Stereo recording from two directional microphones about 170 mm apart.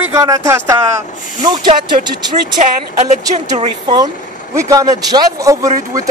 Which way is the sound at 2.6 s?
45° right (ahead or behind).